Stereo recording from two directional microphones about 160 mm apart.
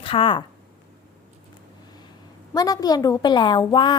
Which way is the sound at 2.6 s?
25° left (ahead or behind).